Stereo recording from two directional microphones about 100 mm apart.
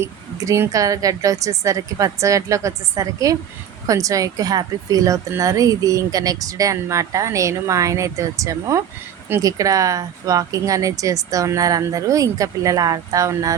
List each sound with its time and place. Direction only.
0.0 s speech: 30° right (ahead or behind)